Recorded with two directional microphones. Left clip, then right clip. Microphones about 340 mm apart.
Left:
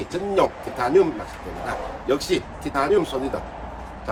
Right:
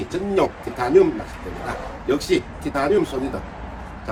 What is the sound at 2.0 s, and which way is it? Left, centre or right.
Speech, centre.